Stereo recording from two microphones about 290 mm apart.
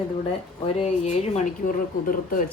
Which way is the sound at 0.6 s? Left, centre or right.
Left.